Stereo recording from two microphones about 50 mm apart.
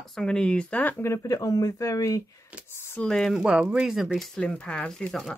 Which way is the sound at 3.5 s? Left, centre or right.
Right.